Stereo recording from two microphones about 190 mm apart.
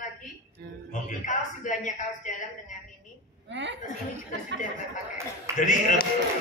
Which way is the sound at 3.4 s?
70° right (ahead or behind).